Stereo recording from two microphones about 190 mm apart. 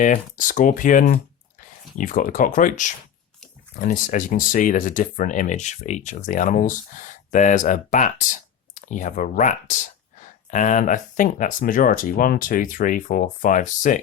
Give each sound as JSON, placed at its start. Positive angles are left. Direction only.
{"t": 0.0, "sound": "speech", "side_deg": 40}